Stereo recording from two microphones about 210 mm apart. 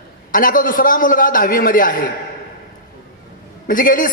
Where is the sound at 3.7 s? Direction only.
40° left (ahead or behind).